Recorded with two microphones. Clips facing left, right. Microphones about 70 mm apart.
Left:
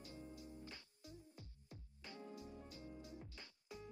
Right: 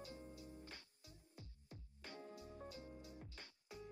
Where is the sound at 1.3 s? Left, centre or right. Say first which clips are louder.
Even; right.